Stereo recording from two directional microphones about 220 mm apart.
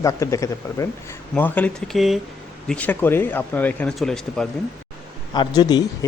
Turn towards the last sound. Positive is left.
turn(degrees=20)  # may be behind; listen again after turning